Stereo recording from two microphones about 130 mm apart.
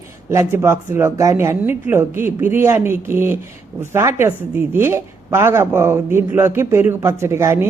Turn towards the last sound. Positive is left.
turn(degrees=-20)  # may be behind; listen again after turning